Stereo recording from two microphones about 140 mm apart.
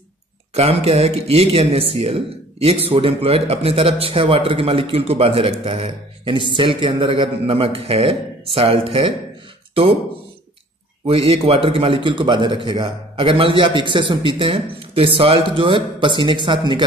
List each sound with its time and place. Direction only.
0.6 s speech: 45° right (ahead or behind)
11.1 s speech: 45° right (ahead or behind)